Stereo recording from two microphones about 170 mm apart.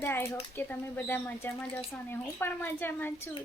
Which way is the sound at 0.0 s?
15° left (ahead or behind).